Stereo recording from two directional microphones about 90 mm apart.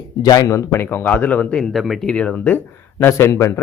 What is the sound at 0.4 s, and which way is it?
Speech, 30° left (ahead or behind).